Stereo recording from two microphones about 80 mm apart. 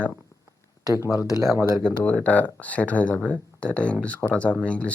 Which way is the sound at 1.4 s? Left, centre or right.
Right.